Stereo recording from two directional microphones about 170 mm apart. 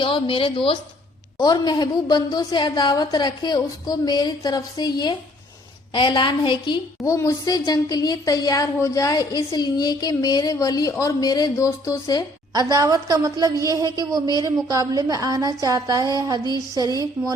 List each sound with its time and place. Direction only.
0.0 s a woman's voice: 30° left (ahead or behind)
12.5 s a woman's voice: 20° right (ahead or behind)